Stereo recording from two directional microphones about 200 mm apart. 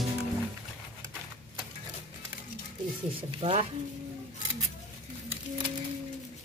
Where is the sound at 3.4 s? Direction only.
30° right (ahead or behind).